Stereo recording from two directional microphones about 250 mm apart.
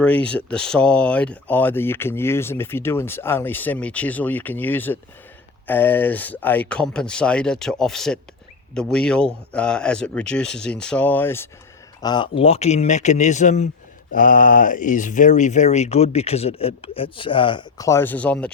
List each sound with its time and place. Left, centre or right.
0.0 s speech: centre